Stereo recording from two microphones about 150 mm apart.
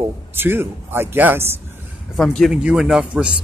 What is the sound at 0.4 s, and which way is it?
Speech, 15° right (ahead or behind).